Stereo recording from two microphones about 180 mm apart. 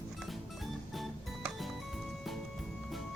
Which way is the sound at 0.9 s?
Centre (ahead or behind).